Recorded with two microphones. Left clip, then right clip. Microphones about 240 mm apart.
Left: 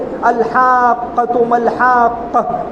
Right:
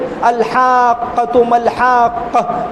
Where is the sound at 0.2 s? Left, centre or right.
Right.